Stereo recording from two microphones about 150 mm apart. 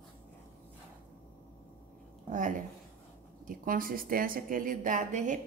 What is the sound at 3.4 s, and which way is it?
A woman's voice, 65° right (ahead or behind).